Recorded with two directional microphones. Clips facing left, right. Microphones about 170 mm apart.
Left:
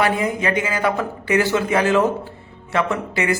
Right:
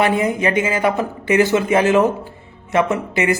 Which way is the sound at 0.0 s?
20° right (ahead or behind).